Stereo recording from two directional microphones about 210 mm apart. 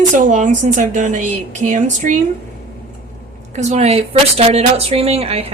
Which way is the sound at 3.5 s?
30° right (ahead or behind).